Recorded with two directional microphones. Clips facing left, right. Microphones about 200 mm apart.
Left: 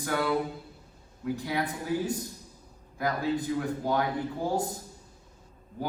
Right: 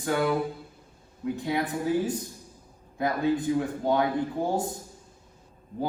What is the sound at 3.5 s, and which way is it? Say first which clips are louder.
Speech: right 5 dB; 20° right (ahead or behind).